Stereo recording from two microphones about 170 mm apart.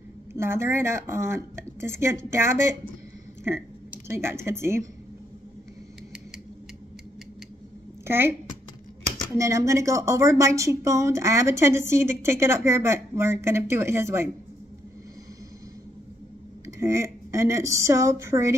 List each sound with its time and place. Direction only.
0.3 s speech: 15° right (ahead or behind)
4.1 s speech: 15° right (ahead or behind)
8.0 s a woman's voice: 15° right (ahead or behind)
9.4 s speech: 15° right (ahead or behind)
16.6 s speech: 15° right (ahead or behind)